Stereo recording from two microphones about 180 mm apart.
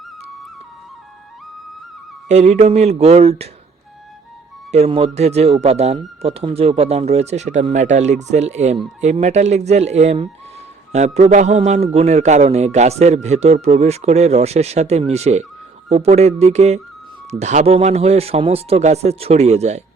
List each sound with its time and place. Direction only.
2.2 s a man's voice: 40° right (ahead or behind)
4.7 s a man's voice: 35° right (ahead or behind)